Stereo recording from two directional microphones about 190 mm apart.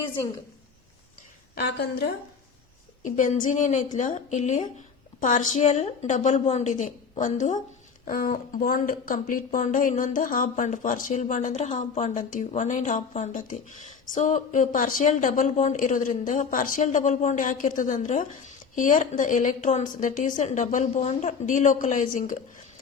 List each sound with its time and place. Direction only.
1.5 s a woman's voice: 65° left (ahead or behind)
3.0 s a woman's voice: 45° left (ahead or behind)